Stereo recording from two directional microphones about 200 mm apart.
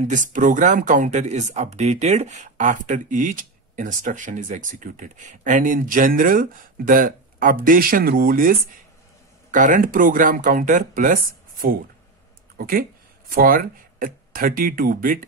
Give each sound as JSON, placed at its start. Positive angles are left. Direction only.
{"t": 0.1, "sound": "speech", "side_deg": -40}